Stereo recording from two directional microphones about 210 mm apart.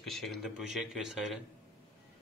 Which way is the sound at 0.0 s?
Centre (ahead or behind).